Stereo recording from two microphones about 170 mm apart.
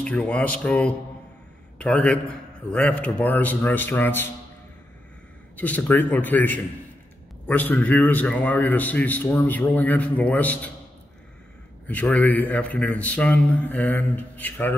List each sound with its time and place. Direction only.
0.0 s a man's voice: 5° left (ahead or behind)
5.6 s a man's voice: 10° left (ahead or behind)
11.9 s a man's voice: 10° left (ahead or behind)